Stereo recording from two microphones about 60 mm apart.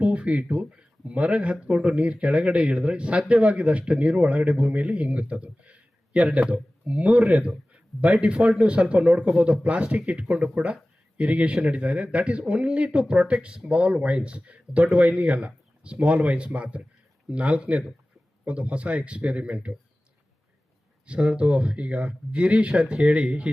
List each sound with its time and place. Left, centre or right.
0.0 s speech: centre
21.1 s speech: centre